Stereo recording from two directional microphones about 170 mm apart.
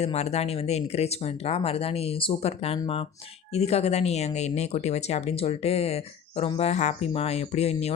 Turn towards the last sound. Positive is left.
turn(degrees=35)  # may be behind; listen again after turning